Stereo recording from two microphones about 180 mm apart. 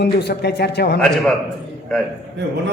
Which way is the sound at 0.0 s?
65° left (ahead or behind).